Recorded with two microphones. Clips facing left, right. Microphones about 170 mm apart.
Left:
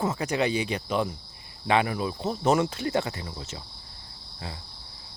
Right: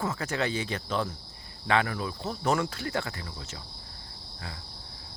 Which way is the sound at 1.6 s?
20° left (ahead or behind).